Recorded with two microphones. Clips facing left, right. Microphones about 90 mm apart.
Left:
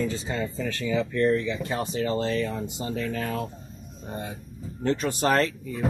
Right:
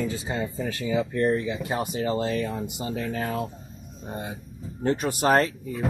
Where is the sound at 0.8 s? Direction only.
40° right (ahead or behind).